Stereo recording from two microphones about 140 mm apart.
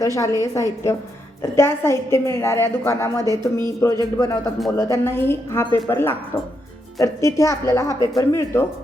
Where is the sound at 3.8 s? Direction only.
25° left (ahead or behind).